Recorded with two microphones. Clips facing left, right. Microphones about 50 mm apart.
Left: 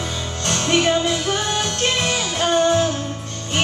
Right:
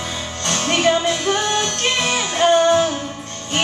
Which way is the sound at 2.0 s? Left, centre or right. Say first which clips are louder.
Right 3 dB; right.